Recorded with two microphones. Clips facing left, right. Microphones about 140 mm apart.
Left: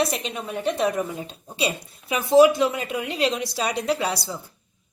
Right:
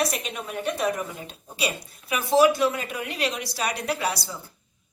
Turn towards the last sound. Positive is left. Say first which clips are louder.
# left 3 dB
turn(degrees=25)  # may be behind; listen again after turning